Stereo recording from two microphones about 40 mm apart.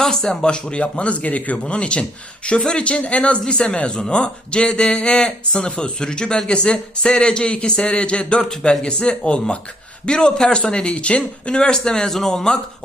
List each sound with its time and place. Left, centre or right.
0.0 s speech: centre; by 3.3 s left
3.4 s speech: centre